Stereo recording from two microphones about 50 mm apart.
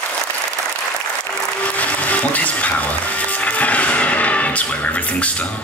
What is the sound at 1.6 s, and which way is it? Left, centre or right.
Music, left.